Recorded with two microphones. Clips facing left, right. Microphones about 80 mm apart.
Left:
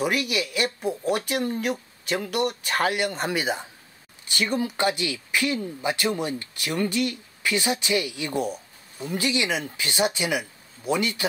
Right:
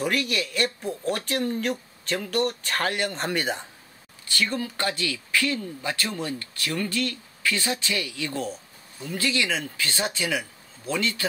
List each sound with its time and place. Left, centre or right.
0.0 s speech: centre
4.3 s speech: centre